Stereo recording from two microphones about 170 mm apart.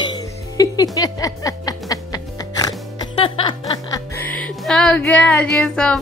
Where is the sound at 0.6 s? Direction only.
20° left (ahead or behind).